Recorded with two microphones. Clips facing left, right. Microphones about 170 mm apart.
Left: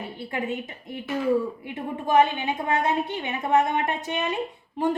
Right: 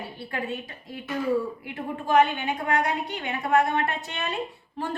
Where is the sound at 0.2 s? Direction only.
20° left (ahead or behind).